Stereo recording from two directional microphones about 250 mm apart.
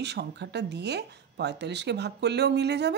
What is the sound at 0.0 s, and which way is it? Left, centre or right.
Speech, right.